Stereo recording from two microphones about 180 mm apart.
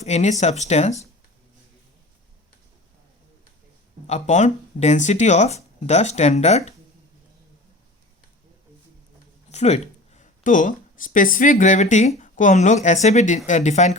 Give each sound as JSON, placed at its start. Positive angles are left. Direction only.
{"t": 0.0, "sound": "speech", "side_deg": 40}
{"t": 4.0, "sound": "speech", "side_deg": 40}
{"t": 9.5, "sound": "speech", "side_deg": 40}